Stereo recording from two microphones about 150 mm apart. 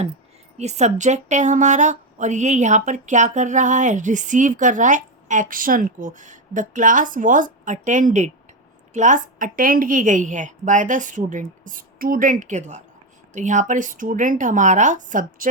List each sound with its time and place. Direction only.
0.5 s speech: 50° right (ahead or behind)